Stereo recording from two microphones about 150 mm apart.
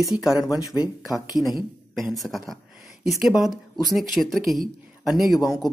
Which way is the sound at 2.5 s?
Centre (ahead or behind).